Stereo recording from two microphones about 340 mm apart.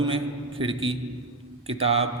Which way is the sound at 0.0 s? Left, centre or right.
Centre.